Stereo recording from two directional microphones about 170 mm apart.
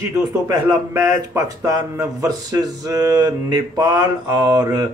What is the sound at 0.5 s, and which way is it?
Speech, 20° right (ahead or behind).